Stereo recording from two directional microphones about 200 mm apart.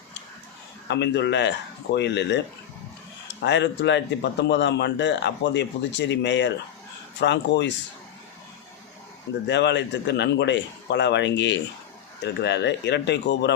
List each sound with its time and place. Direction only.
0.9 s speech: 60° left (ahead or behind)
9.5 s speech: 60° left (ahead or behind)